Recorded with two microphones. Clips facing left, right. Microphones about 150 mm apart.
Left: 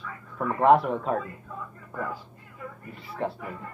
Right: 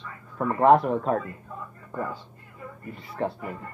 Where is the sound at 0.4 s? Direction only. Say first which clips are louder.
Right 1 dB; centre (ahead or behind).